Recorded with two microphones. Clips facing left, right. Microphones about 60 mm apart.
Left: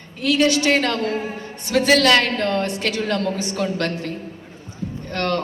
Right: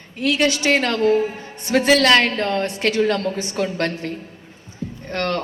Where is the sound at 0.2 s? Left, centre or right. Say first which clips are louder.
Left 1 dB; right.